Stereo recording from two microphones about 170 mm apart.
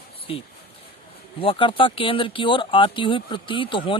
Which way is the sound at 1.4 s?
30° left (ahead or behind).